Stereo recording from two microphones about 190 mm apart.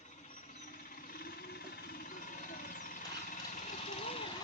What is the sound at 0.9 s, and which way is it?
Jackhammer, 50° left (ahead or behind).